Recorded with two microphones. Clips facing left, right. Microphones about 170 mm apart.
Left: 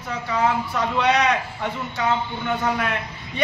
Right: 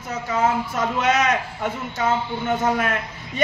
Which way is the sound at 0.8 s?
45° right (ahead or behind).